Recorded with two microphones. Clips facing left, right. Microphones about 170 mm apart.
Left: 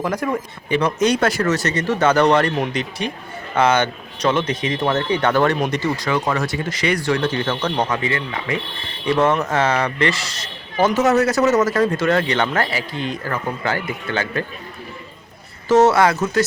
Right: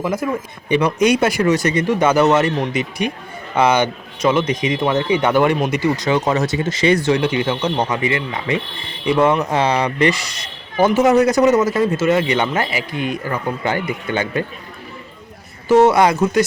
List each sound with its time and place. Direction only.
0.0 s speech: 5° right (ahead or behind)
6.0 s speech: 20° right (ahead or behind)
15.7 s speech: 15° right (ahead or behind)